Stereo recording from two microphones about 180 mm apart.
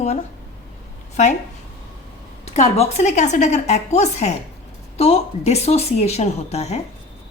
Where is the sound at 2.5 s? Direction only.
35° left (ahead or behind).